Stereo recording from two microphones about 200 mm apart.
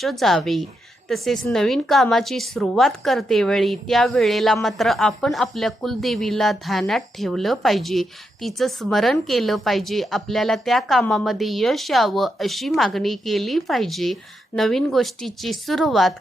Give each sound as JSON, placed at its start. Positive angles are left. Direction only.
{"t": 0.0, "sound": "a woman's voice", "side_deg": 0}